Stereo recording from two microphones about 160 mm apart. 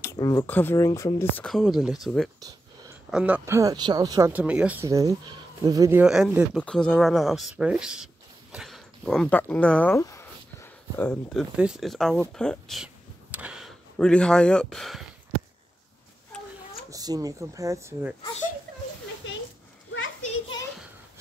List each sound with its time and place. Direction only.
0.0 s speech: 20° left (ahead or behind)
1.5 s speech: centre (ahead or behind); by 4.3 s 25° right (ahead or behind)
4.3 s speech: 10° right (ahead or behind)
4.8 s speech: 20° right (ahead or behind)
6.6 s speech: 5° left (ahead or behind)
9.9 s speech: 20° left (ahead or behind); by 15.0 s centre (ahead or behind)
16.3 s a sound: 5° left (ahead or behind)
16.9 s speech: 25° right (ahead or behind)